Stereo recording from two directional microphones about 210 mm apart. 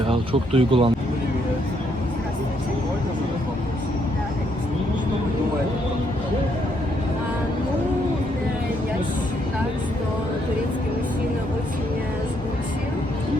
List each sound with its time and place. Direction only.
0.1 s speech: 25° right (ahead or behind)